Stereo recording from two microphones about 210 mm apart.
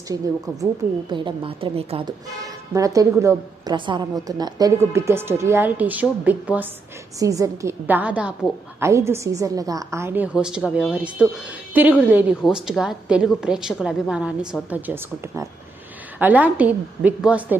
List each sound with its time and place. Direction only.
0.1 s a woman's voice: 15° right (ahead or behind)